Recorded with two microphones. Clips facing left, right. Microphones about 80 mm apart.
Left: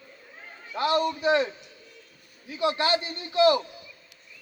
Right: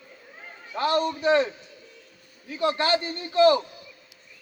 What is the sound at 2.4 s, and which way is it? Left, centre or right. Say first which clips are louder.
A man's voice: right 1 dB; right.